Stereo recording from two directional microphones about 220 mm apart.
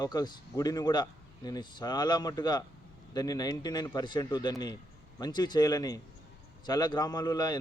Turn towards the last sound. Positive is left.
turn(degrees=20)  # may be behind; listen again after turning